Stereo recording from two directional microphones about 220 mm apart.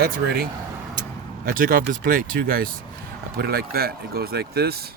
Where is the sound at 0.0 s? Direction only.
45° right (ahead or behind).